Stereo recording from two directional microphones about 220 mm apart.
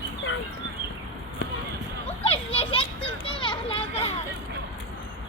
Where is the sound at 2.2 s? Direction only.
25° left (ahead or behind).